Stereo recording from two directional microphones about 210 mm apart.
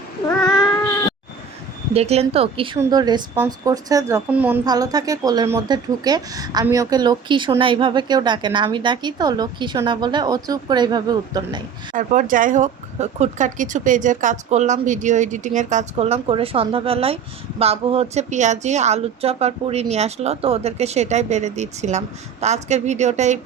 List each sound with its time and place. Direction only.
1.9 s a woman's voice: 30° right (ahead or behind)
11.9 s speech: 40° right (ahead or behind)